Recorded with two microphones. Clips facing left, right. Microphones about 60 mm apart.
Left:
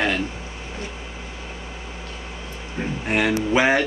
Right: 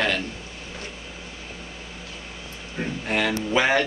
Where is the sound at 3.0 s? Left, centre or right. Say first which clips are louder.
Left 4 dB; left.